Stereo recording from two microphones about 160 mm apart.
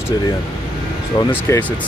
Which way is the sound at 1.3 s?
10° left (ahead or behind).